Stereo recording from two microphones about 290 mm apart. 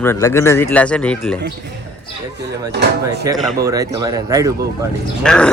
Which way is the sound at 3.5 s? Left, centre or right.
Centre.